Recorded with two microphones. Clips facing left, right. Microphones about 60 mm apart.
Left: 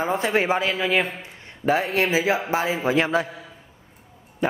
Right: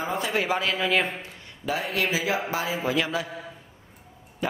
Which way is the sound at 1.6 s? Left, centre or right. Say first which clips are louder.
Left 6 dB; left.